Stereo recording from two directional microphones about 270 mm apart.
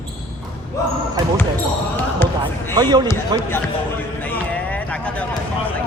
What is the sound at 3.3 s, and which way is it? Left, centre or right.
Speech, centre.